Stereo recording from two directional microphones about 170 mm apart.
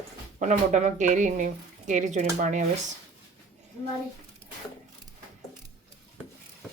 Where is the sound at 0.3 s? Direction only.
45° right (ahead or behind).